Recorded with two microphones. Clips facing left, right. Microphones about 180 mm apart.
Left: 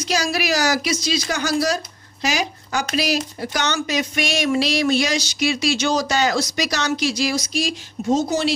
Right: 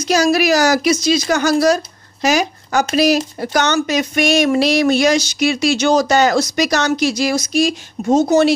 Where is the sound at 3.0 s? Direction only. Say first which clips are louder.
Right 9 dB; 50° right (ahead or behind).